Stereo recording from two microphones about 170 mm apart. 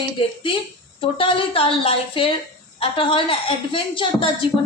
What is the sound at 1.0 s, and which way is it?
A woman's voice, 30° left (ahead or behind).